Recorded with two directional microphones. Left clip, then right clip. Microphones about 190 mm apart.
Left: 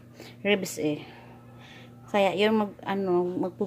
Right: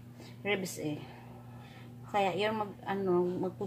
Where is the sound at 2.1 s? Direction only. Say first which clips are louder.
Left 7 dB; 50° left (ahead or behind).